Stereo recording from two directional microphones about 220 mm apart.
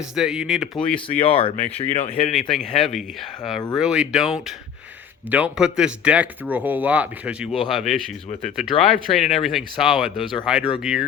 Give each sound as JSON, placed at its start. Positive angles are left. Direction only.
{"t": 0.2, "sound": "speech", "side_deg": 0}
{"t": 0.8, "sound": "speech", "side_deg": 25}
{"t": 2.7, "sound": "speech", "side_deg": 0}